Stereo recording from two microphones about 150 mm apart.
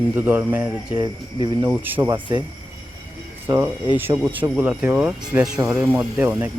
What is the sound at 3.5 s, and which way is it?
Speech, 30° right (ahead or behind).